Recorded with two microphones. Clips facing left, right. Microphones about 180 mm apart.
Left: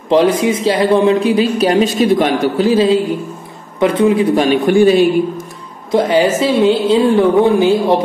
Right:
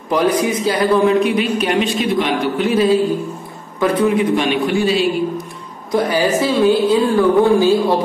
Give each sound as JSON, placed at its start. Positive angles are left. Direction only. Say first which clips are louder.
{"t": 0.1, "sound": "a man's voice", "louder": "left 4 dB", "side_deg": 25}
{"t": 4.4, "sound": "a man's voice", "louder": "left 6 dB", "side_deg": 45}
{"t": 5.9, "sound": "a man's voice", "louder": "left 4 dB", "side_deg": 20}